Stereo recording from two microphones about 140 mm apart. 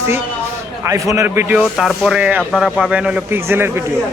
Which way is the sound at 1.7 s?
Centre (ahead or behind).